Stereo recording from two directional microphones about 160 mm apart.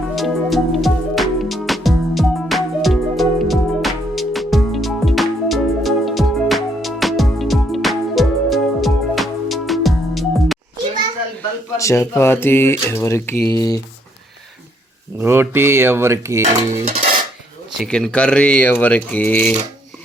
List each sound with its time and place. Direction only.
0.2 s music: centre (ahead or behind)
11.8 s speech: 15° left (ahead or behind)
15.2 s cutlery: 15° right (ahead or behind)
17.7 s speech: 5° left (ahead or behind)